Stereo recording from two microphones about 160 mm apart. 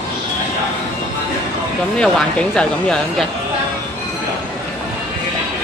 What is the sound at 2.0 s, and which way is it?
Speech, 5° left (ahead or behind).